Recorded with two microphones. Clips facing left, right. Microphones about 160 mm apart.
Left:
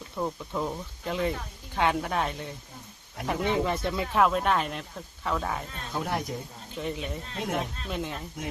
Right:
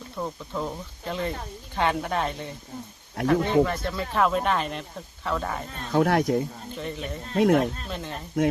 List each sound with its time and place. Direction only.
0.2 s speech: 5° left (ahead or behind)
3.2 s speech: 20° left (ahead or behind)
4.2 s speech: centre (ahead or behind)
5.9 s speech: 75° right (ahead or behind)
6.7 s speech: 5° left (ahead or behind)
7.3 s speech: 60° right (ahead or behind)
7.9 s speech: 10° left (ahead or behind)